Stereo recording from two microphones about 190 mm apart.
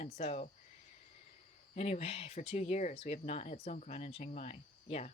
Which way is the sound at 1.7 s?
35° left (ahead or behind).